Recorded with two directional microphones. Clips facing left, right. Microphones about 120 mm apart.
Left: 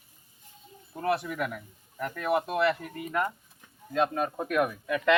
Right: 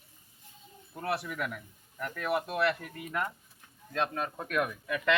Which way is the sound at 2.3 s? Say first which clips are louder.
Left 5 dB; 45° left (ahead or behind).